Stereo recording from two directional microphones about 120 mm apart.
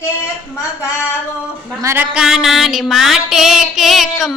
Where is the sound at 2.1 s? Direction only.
5° right (ahead or behind).